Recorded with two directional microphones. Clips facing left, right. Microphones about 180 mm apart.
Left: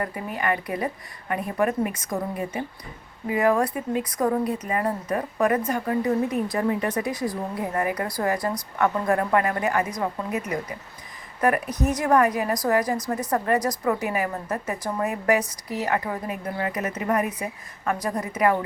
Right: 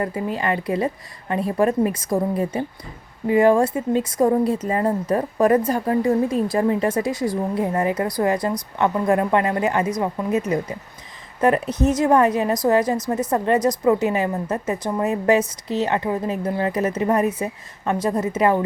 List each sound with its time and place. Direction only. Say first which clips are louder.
0.0 s a woman's voice: right 4 dB; 25° right (ahead or behind)